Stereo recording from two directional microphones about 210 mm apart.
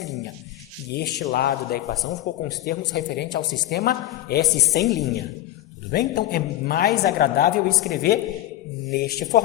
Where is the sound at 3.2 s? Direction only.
20° left (ahead or behind).